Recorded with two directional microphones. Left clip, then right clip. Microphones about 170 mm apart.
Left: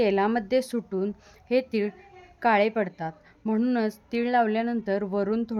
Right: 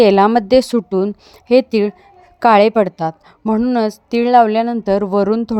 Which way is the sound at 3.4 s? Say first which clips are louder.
Right 10 dB; 35° right (ahead or behind).